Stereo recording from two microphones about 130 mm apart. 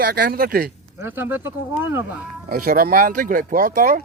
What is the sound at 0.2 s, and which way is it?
Speech, 90° right.